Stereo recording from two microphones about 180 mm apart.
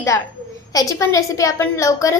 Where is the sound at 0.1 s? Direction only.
15° left (ahead or behind).